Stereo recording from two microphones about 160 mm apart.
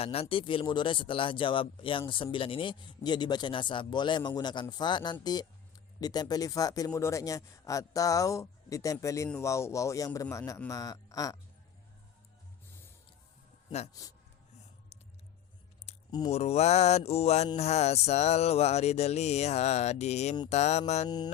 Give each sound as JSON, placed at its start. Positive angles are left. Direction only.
{"t": 0.0, "sound": "a man's voice", "side_deg": 40}
{"t": 14.0, "sound": "a man's voice", "side_deg": 20}
{"t": 15.9, "sound": "a sound", "side_deg": 40}
{"t": 16.3, "sound": "a man's voice", "side_deg": 40}
{"t": 17.6, "sound": "music", "side_deg": 40}